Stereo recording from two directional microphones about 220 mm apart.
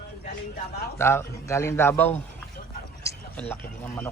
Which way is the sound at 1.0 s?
10° left (ahead or behind).